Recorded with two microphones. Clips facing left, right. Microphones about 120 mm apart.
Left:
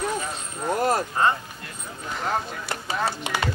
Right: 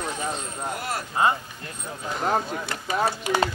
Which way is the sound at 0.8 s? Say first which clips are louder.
Left 9 dB; 40° left (ahead or behind).